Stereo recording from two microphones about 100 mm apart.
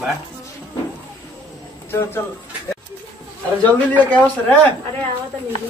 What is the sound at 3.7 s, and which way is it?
A man's voice, 15° left (ahead or behind).